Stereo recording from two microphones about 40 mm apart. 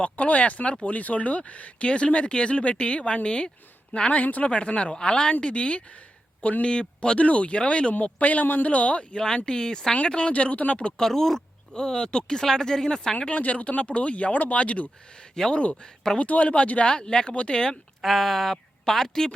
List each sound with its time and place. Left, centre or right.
0.0 s speech: left
4.2 s speech: left
4.4 s speech: left
8.2 s speech: left
10.9 s speech: centre
13.3 s speech: left
15.1 s speech: centre
16.1 s speech: left
16.9 s speech: left
18.0 s a woman's voice: centre